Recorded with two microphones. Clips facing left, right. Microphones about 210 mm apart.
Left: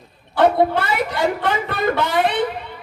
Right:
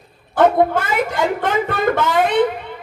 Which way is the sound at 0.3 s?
50° right (ahead or behind).